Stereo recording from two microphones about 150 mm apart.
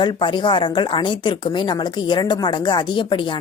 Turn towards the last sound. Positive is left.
turn(degrees=30)  # may be behind; listen again after turning